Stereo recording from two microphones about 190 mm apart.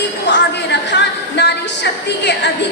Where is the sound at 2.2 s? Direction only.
65° left (ahead or behind).